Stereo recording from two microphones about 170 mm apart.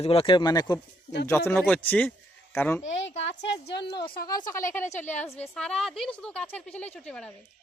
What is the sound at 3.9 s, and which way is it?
Speech, 30° left (ahead or behind).